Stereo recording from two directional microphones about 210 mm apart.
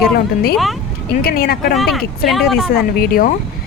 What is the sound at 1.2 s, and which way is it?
Speech, 45° left (ahead or behind).